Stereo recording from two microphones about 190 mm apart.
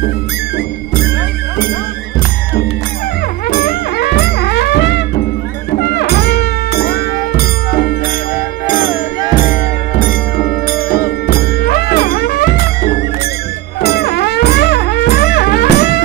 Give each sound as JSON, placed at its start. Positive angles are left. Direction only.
{"t": 3.4, "sound": "music", "side_deg": 50}